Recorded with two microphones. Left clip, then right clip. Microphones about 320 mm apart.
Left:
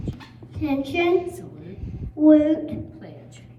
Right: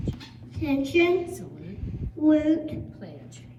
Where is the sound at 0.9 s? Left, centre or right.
Centre.